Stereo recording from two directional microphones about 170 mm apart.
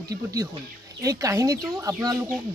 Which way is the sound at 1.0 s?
20° right (ahead or behind).